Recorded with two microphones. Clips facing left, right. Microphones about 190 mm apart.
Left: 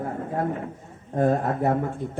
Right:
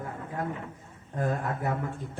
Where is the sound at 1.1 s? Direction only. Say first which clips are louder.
Left 8 dB; 35° left (ahead or behind).